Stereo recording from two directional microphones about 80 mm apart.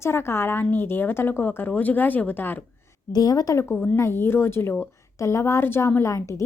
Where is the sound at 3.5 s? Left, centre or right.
Left.